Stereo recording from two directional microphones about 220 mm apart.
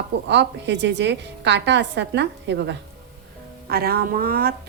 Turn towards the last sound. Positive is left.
turn(degrees=-45)  # may be behind; listen again after turning